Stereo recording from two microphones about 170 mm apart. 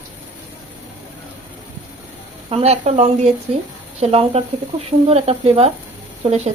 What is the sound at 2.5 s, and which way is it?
A woman's voice, 40° right (ahead or behind).